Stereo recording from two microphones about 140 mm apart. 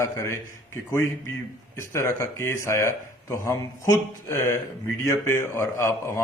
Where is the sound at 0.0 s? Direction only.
20° left (ahead or behind).